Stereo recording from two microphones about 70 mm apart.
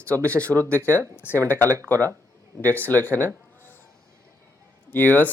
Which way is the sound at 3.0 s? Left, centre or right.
Left.